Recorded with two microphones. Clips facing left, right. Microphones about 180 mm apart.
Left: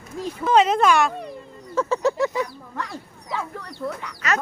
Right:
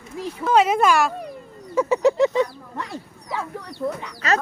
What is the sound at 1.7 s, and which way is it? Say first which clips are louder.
Speech: right 4 dB; 15° right (ahead or behind).